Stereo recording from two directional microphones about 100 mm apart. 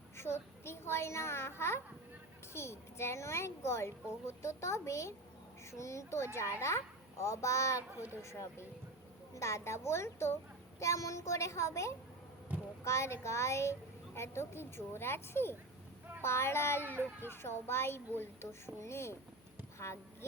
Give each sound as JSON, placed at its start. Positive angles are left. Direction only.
{"t": 0.2, "sound": "a child's voice", "side_deg": 25}
{"t": 16.8, "sound": "speech", "side_deg": -20}
{"t": 17.2, "sound": "a child's voice", "side_deg": 25}